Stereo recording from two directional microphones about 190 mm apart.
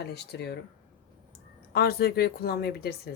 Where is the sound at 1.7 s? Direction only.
55° left (ahead or behind).